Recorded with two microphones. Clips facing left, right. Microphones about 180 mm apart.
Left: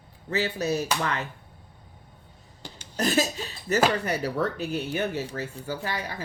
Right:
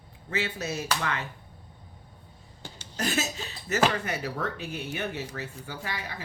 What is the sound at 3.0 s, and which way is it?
Speech, 35° left (ahead or behind).